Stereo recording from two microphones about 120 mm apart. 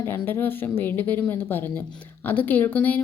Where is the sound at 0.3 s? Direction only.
15° left (ahead or behind).